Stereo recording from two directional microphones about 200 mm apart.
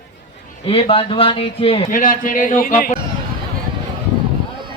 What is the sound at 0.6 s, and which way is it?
Speech, 25° left (ahead or behind).